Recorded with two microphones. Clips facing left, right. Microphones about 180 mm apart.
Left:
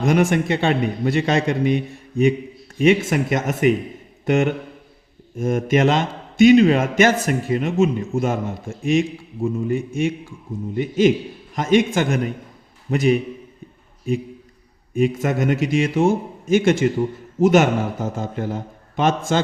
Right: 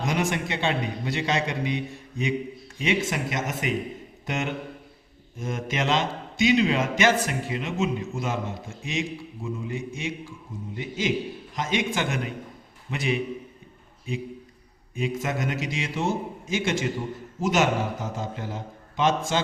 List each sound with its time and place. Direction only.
0.0 s a man's voice: 50° left (ahead or behind)
14.9 s a man's voice: 55° left (ahead or behind)